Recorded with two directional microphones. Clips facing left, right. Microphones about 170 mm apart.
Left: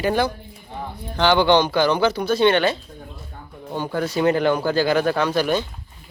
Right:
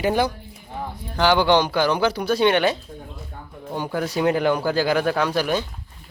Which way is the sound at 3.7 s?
10° right (ahead or behind).